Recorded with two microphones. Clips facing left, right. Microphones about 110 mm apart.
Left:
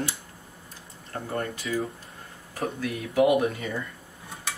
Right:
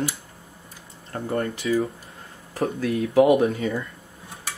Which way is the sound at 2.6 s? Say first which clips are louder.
Right 6 dB; 30° right (ahead or behind).